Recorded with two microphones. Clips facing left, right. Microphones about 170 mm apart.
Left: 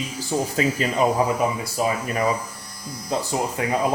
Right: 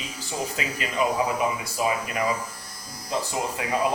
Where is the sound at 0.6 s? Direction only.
35° left (ahead or behind).